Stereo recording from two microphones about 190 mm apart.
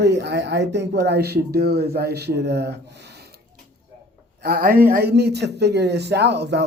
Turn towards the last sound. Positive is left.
turn(degrees=-65)  # may be behind; listen again after turning